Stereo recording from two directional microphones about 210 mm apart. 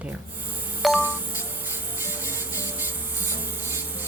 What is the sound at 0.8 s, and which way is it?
Music, 5° right (ahead or behind).